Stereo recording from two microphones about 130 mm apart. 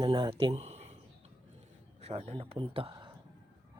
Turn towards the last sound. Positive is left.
turn(degrees=-45)  # may be behind; listen again after turning